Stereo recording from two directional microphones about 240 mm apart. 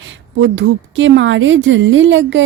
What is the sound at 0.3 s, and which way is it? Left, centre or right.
A woman's voice, right.